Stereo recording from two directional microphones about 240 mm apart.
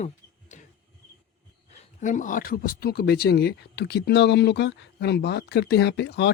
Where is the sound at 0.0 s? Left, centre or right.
Left.